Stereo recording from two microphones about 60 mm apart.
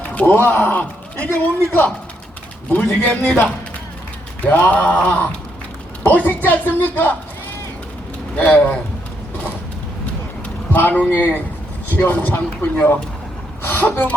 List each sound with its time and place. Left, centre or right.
0.0 s a sound: left
0.3 s a man's voice: left
4.4 s speech: left
8.4 s speech: left
10.7 s a man's voice: left